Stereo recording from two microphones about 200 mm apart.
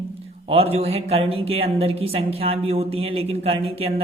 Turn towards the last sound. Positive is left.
turn(degrees=-30)  # may be behind; listen again after turning